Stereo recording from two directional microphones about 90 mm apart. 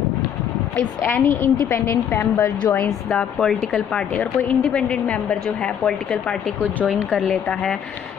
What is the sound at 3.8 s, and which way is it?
Speech, 10° left (ahead or behind).